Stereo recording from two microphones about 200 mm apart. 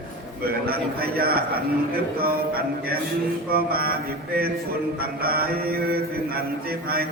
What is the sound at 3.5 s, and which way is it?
Mantra, 50° right (ahead or behind).